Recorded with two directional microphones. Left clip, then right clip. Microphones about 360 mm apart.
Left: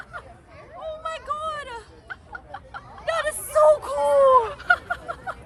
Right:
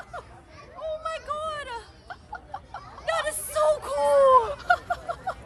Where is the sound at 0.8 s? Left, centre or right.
Centre.